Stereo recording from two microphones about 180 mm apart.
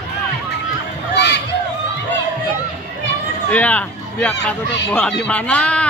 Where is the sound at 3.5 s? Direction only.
10° left (ahead or behind).